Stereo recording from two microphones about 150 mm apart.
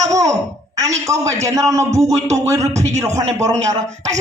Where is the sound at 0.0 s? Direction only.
20° right (ahead or behind).